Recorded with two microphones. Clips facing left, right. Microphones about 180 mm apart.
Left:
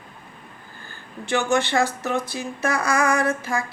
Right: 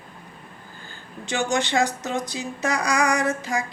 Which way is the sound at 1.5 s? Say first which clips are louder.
Left 1 dB; 15° right (ahead or behind).